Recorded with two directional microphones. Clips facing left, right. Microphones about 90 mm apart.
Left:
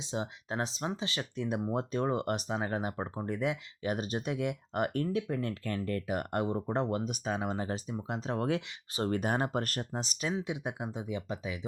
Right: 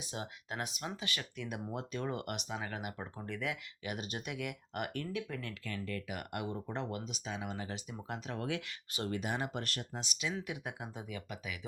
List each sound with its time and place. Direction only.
0.0 s speech: 25° left (ahead or behind)
7.9 s speech: 25° left (ahead or behind)
10.3 s speech: 20° left (ahead or behind)